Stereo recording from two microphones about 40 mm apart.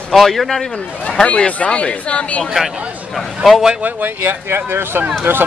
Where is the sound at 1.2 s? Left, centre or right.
Left.